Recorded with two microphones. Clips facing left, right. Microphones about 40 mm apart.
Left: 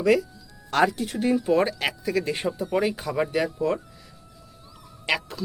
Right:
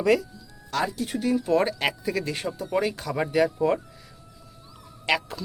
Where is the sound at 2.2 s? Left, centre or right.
Centre.